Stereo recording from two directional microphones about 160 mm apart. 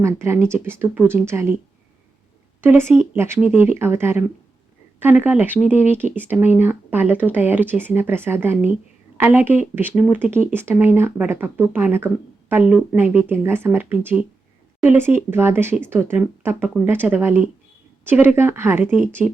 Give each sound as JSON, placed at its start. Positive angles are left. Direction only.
{"t": 0.0, "sound": "speech", "side_deg": -15}
{"t": 2.6, "sound": "speech", "side_deg": -15}